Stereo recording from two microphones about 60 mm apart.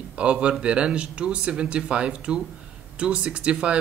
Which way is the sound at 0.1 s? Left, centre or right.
Centre.